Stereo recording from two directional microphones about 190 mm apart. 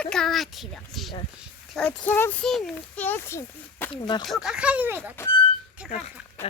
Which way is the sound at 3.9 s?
25° left (ahead or behind).